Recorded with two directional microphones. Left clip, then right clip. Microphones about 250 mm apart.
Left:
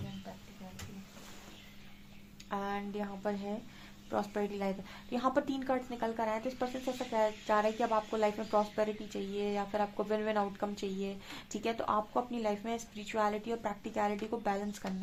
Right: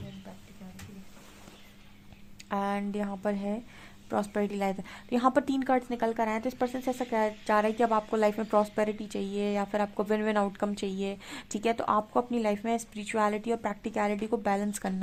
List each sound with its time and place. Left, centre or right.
2.5 s speech: right